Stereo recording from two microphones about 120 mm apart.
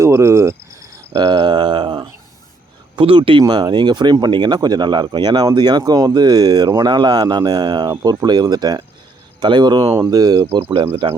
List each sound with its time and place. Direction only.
0.0 s cricket: 25° right (ahead or behind)
1.1 s a sound: 40° right (ahead or behind)
2.9 s speech: 45° right (ahead or behind)
10.5 s speech: 45° right (ahead or behind)